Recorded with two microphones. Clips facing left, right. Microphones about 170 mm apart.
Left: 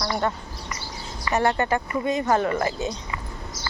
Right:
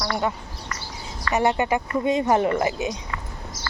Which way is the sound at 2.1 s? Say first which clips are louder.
Right 2 dB; 25° right (ahead or behind).